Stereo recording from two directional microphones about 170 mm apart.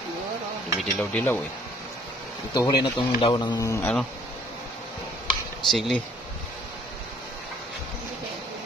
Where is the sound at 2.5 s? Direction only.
25° left (ahead or behind).